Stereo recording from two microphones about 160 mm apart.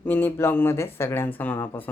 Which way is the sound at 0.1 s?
10° left (ahead or behind).